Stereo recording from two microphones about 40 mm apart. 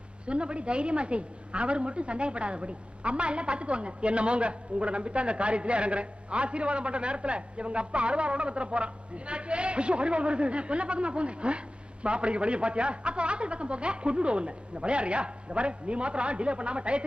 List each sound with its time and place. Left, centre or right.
0.3 s a woman's voice: right